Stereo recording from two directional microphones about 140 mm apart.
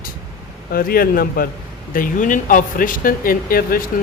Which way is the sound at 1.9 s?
75° left (ahead or behind).